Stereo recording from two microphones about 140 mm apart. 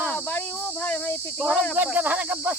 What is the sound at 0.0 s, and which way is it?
Cricket, 10° left (ahead or behind).